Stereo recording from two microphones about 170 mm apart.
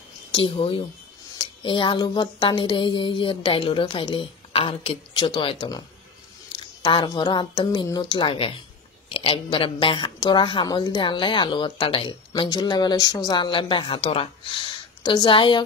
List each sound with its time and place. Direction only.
0.3 s speech: 30° left (ahead or behind)